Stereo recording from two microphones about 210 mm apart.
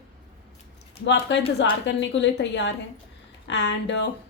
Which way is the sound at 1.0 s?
60° left (ahead or behind).